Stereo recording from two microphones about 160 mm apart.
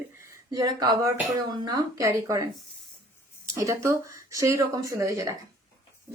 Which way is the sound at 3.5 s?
20° right (ahead or behind).